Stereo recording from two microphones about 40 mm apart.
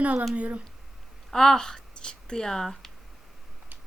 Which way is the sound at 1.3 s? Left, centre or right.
Centre.